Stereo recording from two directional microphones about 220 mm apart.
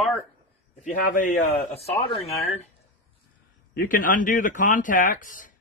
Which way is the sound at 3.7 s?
40° left (ahead or behind).